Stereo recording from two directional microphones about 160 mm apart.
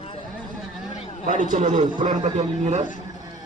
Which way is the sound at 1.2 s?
55° right (ahead or behind).